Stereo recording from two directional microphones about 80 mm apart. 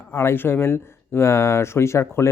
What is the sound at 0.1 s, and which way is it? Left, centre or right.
Speech, left.